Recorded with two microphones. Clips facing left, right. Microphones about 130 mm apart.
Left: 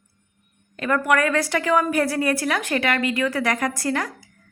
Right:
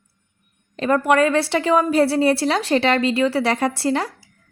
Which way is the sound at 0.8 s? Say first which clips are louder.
Right 4 dB; 30° right (ahead or behind).